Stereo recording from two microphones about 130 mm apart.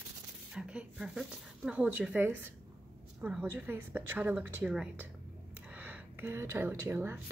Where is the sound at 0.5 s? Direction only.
5° right (ahead or behind).